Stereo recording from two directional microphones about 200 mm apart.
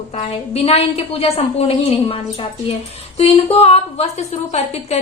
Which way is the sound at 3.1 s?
30° left (ahead or behind).